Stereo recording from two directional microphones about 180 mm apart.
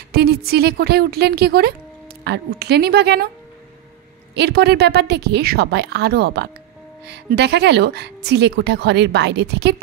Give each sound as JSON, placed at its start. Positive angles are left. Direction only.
{"t": 0.1, "sound": "speech", "side_deg": -60}
{"t": 4.4, "sound": "speech", "side_deg": -65}